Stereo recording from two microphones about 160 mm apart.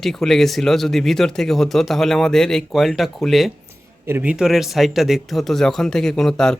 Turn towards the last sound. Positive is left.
turn(degrees=5)  # may be behind; listen again after turning